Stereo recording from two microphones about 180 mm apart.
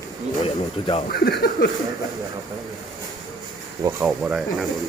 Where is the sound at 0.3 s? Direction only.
30° left (ahead or behind).